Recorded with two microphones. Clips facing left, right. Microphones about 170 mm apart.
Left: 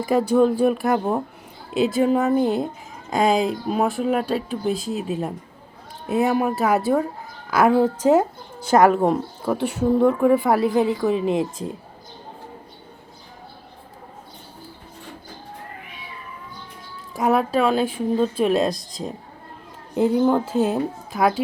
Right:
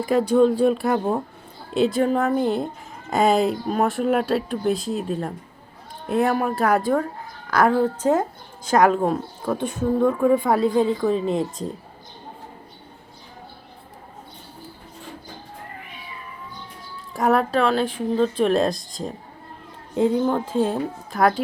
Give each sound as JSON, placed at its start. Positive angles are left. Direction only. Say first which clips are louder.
{"t": 0.6, "sound": "a woman's voice", "louder": "even", "side_deg": 5}
{"t": 17.2, "sound": "speech", "louder": "even", "side_deg": 0}
{"t": 20.0, "sound": "a woman's voice", "louder": "left 2 dB", "side_deg": 10}